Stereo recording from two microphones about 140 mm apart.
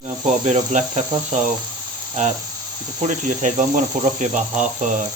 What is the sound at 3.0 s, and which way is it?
Cricket, 65° right (ahead or behind).